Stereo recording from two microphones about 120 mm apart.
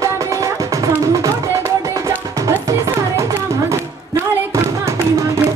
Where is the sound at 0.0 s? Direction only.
30° right (ahead or behind).